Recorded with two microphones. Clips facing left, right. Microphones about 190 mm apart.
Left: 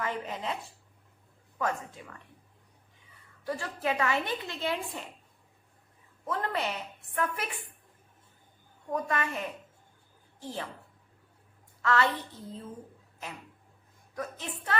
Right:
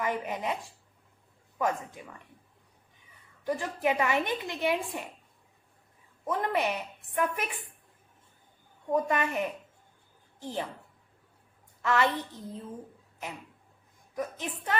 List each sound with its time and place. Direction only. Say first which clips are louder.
0.0 s a woman's voice: right 3 dB; 15° right (ahead or behind)
1.5 s a woman's voice: right 2 dB; 15° right (ahead or behind)
3.4 s a woman's voice: right 3 dB; 20° right (ahead or behind)
6.2 s a woman's voice: right 3 dB; 15° right (ahead or behind)
8.9 s a woman's voice: right 4 dB; 20° right (ahead or behind)
11.8 s a woman's voice: right 1 dB; 15° right (ahead or behind)
14.2 s a woman's voice: right 3 dB; 15° right (ahead or behind)